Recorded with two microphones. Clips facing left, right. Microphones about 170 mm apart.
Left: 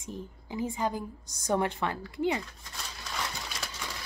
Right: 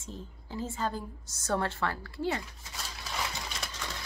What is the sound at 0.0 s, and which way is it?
Speech, 15° left (ahead or behind).